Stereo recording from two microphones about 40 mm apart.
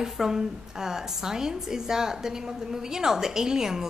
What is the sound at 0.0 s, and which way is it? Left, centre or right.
A woman's voice, centre.